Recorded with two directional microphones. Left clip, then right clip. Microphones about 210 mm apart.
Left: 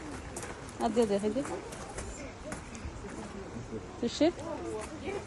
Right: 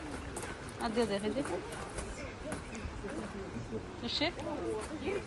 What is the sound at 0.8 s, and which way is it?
Speech, 25° left (ahead or behind).